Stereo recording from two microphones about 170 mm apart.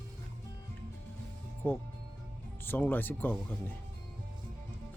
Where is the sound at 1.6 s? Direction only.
10° left (ahead or behind).